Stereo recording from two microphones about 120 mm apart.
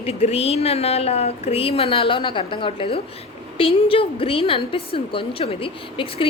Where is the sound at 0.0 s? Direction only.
60° left (ahead or behind).